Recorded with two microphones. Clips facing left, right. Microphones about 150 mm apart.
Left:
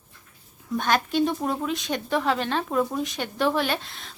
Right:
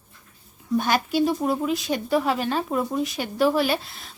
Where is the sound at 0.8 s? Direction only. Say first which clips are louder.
Right 1 dB; 10° right (ahead or behind).